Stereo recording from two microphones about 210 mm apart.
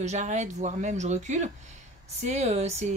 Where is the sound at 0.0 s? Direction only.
35° right (ahead or behind).